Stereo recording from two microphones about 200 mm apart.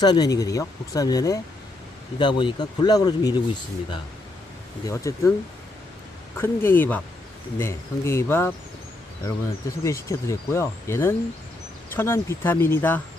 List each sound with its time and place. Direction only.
0.0 s speech: 20° left (ahead or behind)
4.9 s speech: 15° left (ahead or behind)
6.3 s speech: 10° left (ahead or behind)